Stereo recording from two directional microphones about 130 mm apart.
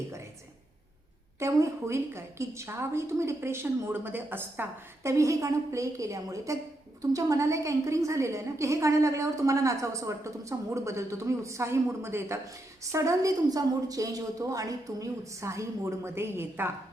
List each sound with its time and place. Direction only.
1.4 s a woman's voice: 25° right (ahead or behind)